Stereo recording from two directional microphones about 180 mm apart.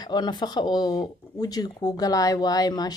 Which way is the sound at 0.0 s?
25° left (ahead or behind).